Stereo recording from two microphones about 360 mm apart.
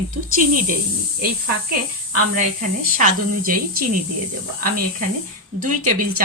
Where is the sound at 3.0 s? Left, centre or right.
Right.